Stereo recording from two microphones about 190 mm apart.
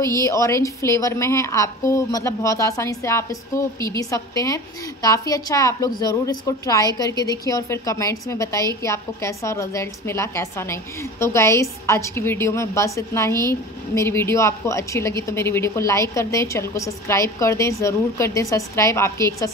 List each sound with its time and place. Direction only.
0.0 s a woman's voice: 15° left (ahead or behind)